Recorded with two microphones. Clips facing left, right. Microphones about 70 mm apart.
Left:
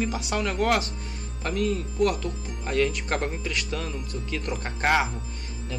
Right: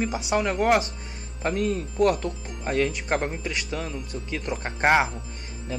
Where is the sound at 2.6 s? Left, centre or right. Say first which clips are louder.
Even; centre.